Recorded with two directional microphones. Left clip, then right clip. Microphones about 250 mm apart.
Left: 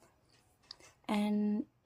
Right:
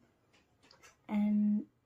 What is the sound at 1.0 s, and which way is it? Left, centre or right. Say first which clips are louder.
Speech: left 1 dB; left.